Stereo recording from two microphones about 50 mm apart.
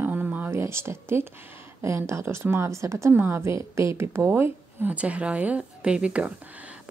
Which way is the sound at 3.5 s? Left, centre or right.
Right.